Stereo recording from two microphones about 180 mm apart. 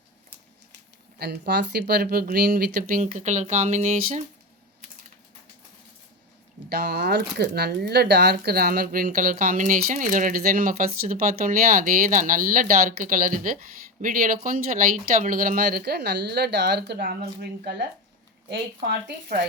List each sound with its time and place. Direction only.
1.2 s speech: 65° right (ahead or behind); by 4.2 s 40° right (ahead or behind)
6.7 s speech: 60° right (ahead or behind)